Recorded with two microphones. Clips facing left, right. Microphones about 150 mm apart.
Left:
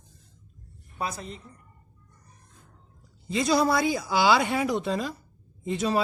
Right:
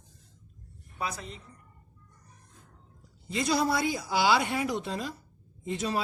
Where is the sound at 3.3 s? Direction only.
90° left.